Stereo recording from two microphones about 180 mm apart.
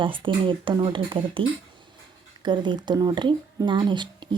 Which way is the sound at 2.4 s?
25° right (ahead or behind).